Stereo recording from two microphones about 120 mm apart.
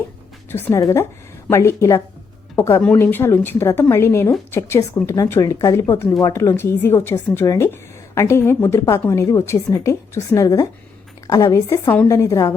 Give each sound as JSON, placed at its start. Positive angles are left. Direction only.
{"t": 0.5, "sound": "a woman's voice", "side_deg": 20}